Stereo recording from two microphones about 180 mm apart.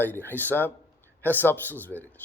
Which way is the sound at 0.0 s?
10° left (ahead or behind).